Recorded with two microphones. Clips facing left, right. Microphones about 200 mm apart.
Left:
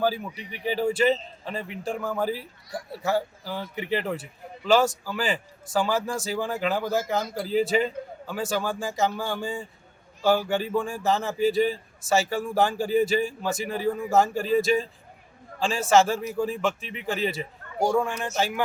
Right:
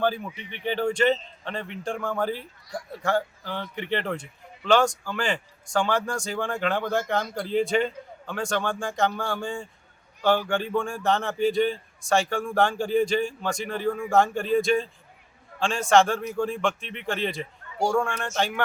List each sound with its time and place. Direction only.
0.0 s speech: 5° left (ahead or behind)
0.3 s speech: 40° left (ahead or behind)
0.6 s speech: 5° left (ahead or behind)